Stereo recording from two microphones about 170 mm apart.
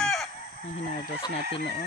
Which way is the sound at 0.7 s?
45° left (ahead or behind).